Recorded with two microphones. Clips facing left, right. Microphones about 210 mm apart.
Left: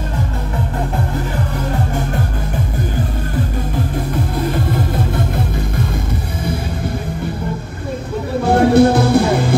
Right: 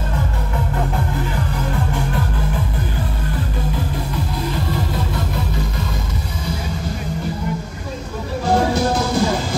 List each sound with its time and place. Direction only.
4.5 s music: 55° left (ahead or behind)
8.5 s music: 60° left (ahead or behind)